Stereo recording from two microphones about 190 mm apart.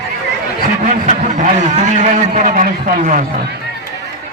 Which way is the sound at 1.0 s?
40° right (ahead or behind).